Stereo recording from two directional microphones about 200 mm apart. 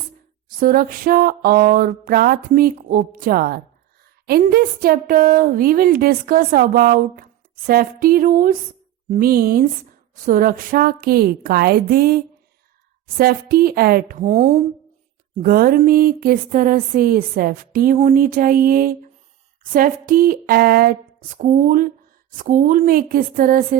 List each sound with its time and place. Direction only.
0.4 s a woman's voice: 45° right (ahead or behind)